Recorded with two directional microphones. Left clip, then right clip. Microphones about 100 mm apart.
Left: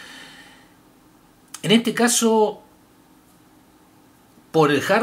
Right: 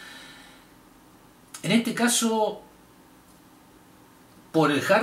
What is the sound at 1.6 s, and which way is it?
Speech, 40° left (ahead or behind).